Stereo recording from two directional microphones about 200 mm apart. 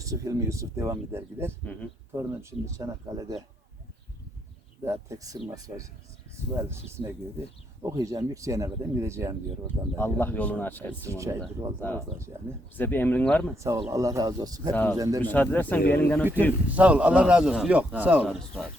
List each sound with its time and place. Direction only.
0.0 s a man's voice: 15° right (ahead or behind)
4.9 s a man's voice: 15° right (ahead or behind)
10.0 s speech: 10° left (ahead or behind)
11.1 s a man's voice: 15° right (ahead or behind)
12.7 s speech: 10° left (ahead or behind)
13.6 s a man's voice: 15° right (ahead or behind)
14.7 s speech: 5° left (ahead or behind)
14.9 s a man's voice: 15° right (ahead or behind)
15.2 s speech: 10° left (ahead or behind)
16.7 s a man's voice: 5° right (ahead or behind)